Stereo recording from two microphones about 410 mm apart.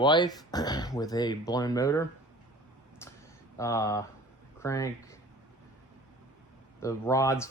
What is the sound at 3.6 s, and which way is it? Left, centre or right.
Speech, centre.